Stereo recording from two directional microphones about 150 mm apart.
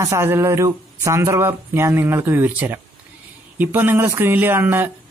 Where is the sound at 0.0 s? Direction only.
20° right (ahead or behind).